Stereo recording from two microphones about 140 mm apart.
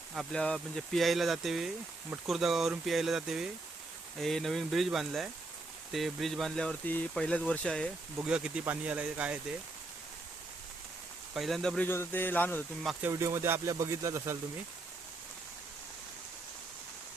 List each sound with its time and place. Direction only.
0.3 s speech: 5° left (ahead or behind)
8.2 s speech: 5° right (ahead or behind)
11.3 s speech: centre (ahead or behind)
11.9 s speech: 15° left (ahead or behind)
12.8 s speech: centre (ahead or behind)
13.1 s speech: 20° right (ahead or behind)